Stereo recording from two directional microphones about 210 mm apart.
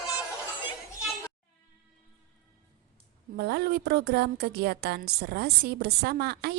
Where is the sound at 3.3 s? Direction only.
50° right (ahead or behind).